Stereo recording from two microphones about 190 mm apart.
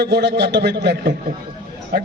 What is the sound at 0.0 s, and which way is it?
A man's voice, 60° right (ahead or behind).